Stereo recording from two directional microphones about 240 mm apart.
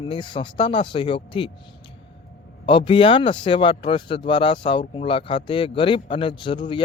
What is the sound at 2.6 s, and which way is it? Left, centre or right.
A man's voice, left.